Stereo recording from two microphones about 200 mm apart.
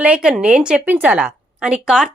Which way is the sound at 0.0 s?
5° right (ahead or behind).